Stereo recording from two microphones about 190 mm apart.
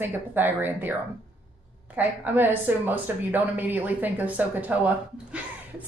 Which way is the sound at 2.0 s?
10° right (ahead or behind).